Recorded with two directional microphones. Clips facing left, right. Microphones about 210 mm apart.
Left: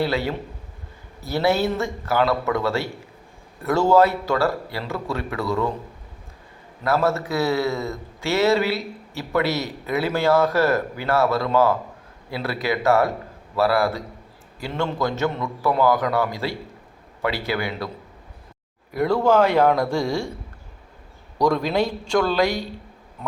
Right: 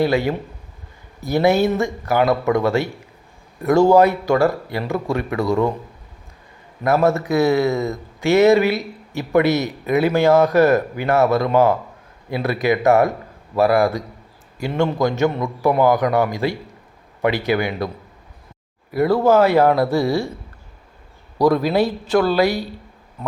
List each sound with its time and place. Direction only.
0.0 s a man's voice: 15° right (ahead or behind)
6.8 s a man's voice: 15° right (ahead or behind)
18.9 s speech: 5° right (ahead or behind)
21.3 s a man's voice: 5° right (ahead or behind)